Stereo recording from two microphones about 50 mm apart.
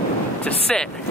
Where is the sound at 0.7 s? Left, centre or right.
Centre.